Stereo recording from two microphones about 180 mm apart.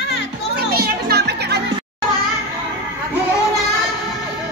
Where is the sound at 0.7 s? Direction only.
60° right (ahead or behind).